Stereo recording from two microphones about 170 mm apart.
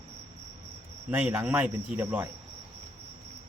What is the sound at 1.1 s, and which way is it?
Speech, 10° right (ahead or behind).